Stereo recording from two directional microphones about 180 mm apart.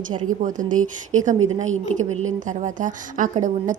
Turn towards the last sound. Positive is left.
turn(degrees=-45)  # may be behind; listen again after turning